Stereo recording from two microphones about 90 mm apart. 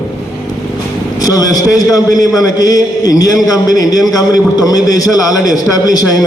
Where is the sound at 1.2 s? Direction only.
45° left (ahead or behind).